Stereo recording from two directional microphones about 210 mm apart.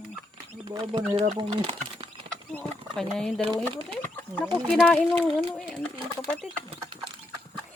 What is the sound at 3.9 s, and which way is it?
Chicken, 5° left (ahead or behind).